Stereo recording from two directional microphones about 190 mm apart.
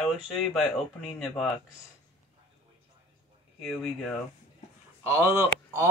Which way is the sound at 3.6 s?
Centre (ahead or behind).